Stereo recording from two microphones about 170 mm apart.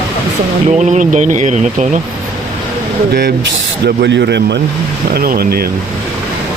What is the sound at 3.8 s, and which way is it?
Speech, 85° right.